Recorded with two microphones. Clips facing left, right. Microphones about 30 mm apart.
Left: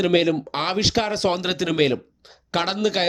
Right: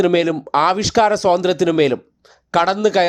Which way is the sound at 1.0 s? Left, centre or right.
Centre.